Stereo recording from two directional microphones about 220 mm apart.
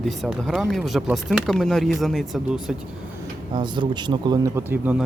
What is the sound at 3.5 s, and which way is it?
Speech, 20° right (ahead or behind).